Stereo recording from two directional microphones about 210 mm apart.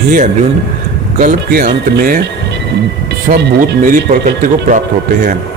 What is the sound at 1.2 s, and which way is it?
Speech, 45° right (ahead or behind).